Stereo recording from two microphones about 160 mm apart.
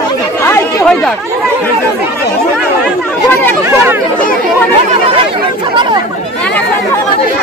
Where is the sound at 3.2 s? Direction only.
15° left (ahead or behind).